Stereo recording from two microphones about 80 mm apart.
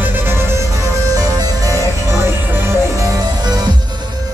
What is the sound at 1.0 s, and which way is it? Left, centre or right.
Music, right.